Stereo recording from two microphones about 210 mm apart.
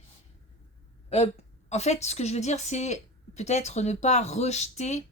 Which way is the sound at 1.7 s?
30° left (ahead or behind).